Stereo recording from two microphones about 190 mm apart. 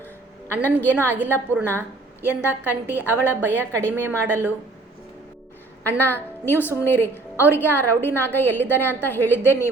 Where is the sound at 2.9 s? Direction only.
10° left (ahead or behind).